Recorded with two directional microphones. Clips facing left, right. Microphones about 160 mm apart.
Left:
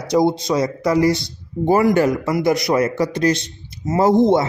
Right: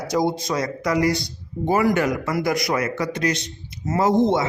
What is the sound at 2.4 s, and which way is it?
Speech, 25° left (ahead or behind).